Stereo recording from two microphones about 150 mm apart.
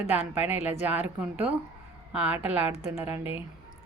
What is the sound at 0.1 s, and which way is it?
A woman's voice, 10° right (ahead or behind).